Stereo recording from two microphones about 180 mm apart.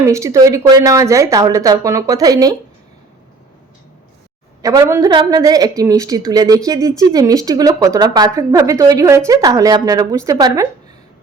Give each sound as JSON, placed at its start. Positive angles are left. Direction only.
{"t": 0.0, "sound": "a woman's voice", "side_deg": -15}
{"t": 4.6, "sound": "a woman's voice", "side_deg": -20}